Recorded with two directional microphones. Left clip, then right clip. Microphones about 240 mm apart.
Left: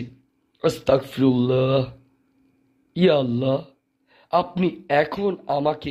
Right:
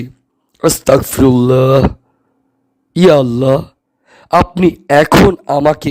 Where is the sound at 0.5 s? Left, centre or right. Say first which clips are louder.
Right 9 dB; right.